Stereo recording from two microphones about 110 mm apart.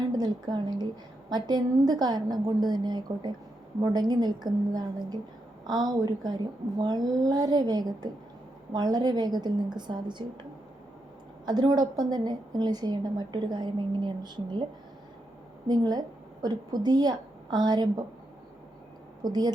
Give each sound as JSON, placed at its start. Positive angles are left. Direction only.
{"t": 0.0, "sound": "a woman's voice", "side_deg": -40}
{"t": 11.4, "sound": "a woman's voice", "side_deg": -40}
{"t": 19.2, "sound": "a woman's voice", "side_deg": -40}